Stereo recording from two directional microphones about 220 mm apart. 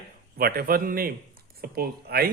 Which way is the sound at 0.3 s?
45° right (ahead or behind).